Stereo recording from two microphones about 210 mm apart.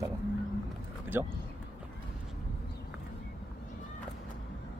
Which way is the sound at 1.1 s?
10° right (ahead or behind).